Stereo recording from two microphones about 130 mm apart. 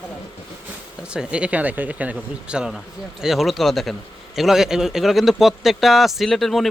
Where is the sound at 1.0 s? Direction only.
5° right (ahead or behind).